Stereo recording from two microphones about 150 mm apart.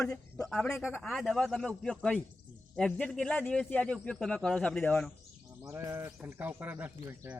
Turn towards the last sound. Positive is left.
turn(degrees=-15)  # may be behind; listen again after turning